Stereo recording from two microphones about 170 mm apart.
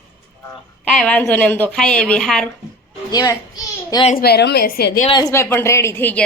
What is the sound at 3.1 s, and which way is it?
Speech, 20° left (ahead or behind).